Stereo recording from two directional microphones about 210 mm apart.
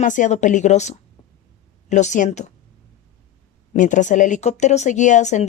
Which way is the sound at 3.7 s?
35° left (ahead or behind).